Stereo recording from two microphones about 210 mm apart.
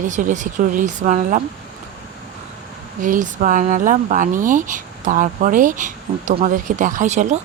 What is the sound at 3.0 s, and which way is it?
Speech, 40° right (ahead or behind).